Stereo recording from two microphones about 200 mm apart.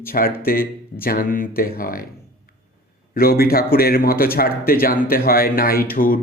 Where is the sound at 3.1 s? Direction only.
50° left (ahead or behind).